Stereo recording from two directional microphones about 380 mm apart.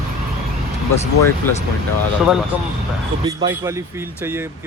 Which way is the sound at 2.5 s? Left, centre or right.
Centre.